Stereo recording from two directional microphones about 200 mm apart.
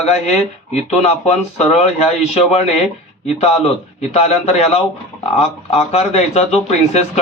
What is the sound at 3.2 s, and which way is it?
Speech, 30° left (ahead or behind).